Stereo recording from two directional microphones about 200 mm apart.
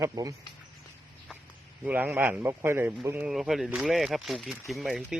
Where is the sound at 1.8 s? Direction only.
10° right (ahead or behind).